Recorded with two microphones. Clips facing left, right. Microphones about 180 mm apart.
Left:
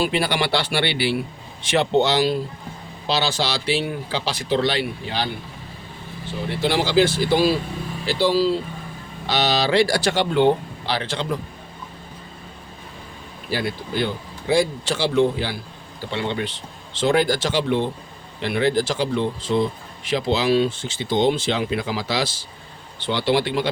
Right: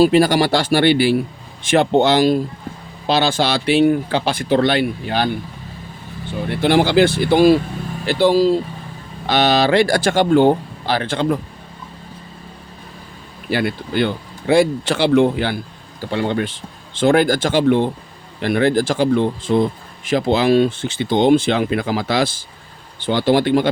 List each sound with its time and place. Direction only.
0.0 s speech: 45° right (ahead or behind)
6.5 s speech: 55° right (ahead or behind)
13.5 s speech: 60° right (ahead or behind)